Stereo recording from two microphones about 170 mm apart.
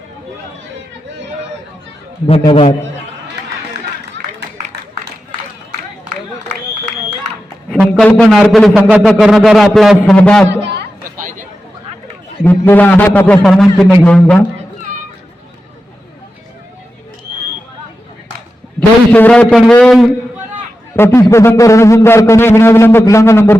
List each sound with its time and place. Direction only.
2.4 s a man's voice: 30° left (ahead or behind)
4.4 s a sound: 80° right
7.7 s a man's voice: 5° left (ahead or behind)
10.2 s a man's voice: 10° left (ahead or behind)
11.2 s a sound: 50° right (ahead or behind)
12.4 s a man's voice: 10° left (ahead or behind)
18.8 s a man's voice: 10° left (ahead or behind)
20.9 s a man's voice: 15° left (ahead or behind)